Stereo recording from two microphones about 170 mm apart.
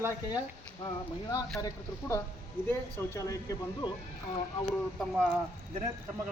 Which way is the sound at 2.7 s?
15° left (ahead or behind).